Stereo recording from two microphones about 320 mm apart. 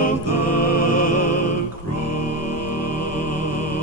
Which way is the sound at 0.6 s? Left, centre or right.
Left.